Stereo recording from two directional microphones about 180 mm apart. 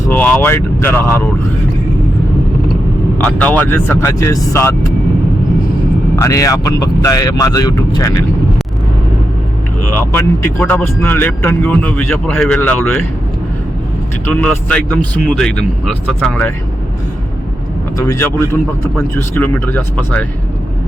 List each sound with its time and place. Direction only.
0.1 s speech: 10° left (ahead or behind)
3.2 s speech: 10° left (ahead or behind)
6.1 s speech: 20° left (ahead or behind)
9.9 s speech: 10° left (ahead or behind)
14.3 s speech: 10° left (ahead or behind)
17.9 s speech: 15° left (ahead or behind)